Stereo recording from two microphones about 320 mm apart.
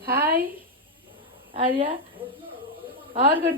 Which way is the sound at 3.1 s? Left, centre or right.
Right.